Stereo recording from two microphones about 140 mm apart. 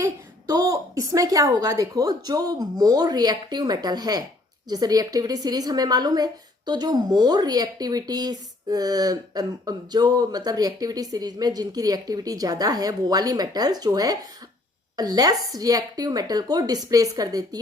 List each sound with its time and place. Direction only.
0.0 s a woman's voice: 25° right (ahead or behind)